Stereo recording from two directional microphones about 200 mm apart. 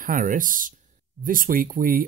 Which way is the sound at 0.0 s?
45° right (ahead or behind).